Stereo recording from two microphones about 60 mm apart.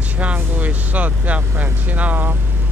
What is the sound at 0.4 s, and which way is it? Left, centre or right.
Speech, right.